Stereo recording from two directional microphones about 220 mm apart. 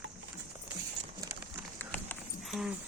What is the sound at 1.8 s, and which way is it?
Clip-clop, 5° left (ahead or behind).